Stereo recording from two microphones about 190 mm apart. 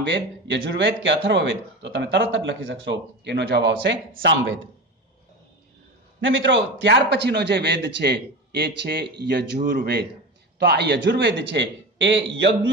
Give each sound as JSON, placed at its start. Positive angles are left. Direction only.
{"t": 0.0, "sound": "speech", "side_deg": -65}
{"t": 6.2, "sound": "a man's voice", "side_deg": -75}